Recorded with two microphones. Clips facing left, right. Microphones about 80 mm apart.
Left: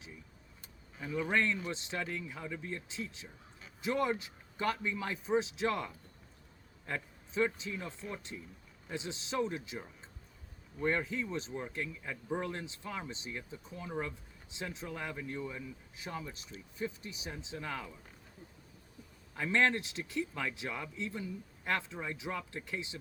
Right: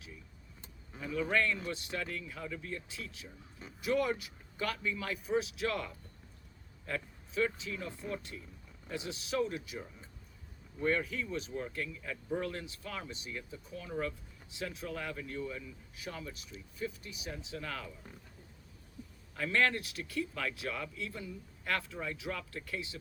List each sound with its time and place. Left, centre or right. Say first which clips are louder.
1.0 s speech: even; left
10.8 s speech: even; left
19.4 s speech: left 1 dB; left